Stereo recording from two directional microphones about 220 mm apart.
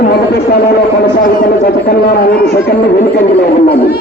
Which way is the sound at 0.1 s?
45° left (ahead or behind).